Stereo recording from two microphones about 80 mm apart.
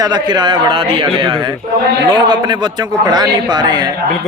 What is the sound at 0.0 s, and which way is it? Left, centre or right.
A man's voice, right.